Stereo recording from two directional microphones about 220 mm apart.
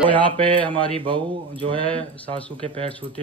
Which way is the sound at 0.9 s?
25° right (ahead or behind).